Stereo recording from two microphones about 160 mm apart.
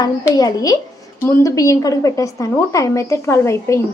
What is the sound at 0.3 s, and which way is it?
A woman's voice, 25° left (ahead or behind).